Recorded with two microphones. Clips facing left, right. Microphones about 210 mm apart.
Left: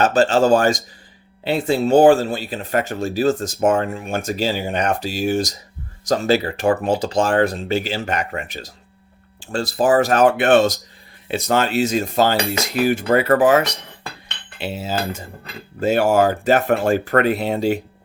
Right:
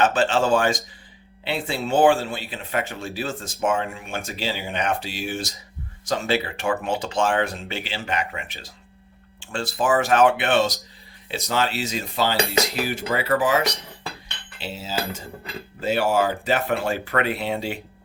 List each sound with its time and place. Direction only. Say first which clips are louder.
0.0 s speech: left 5 dB; 40° left (ahead or behind)
14.6 s cutlery: left 7 dB; 55° left (ahead or behind)
15.8 s speech: left 5 dB; 45° left (ahead or behind)